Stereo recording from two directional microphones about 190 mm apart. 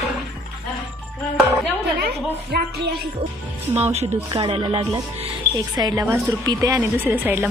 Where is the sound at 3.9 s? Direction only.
35° right (ahead or behind).